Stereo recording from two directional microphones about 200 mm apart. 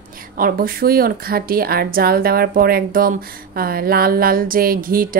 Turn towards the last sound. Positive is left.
turn(degrees=-45)  # may be behind; listen again after turning